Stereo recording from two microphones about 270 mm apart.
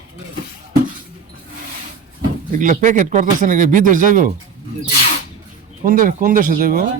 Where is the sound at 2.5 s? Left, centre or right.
Right.